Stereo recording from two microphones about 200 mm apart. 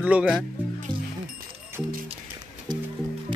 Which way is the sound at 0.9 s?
20° right (ahead or behind).